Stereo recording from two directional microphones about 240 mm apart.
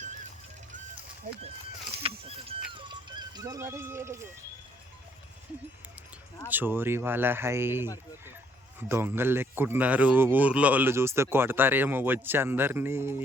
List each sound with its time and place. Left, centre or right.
2.0 s speech: right
2.7 s a sound: centre
6.5 s speech: centre